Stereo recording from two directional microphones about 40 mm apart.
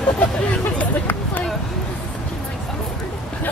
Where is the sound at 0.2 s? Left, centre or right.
Left.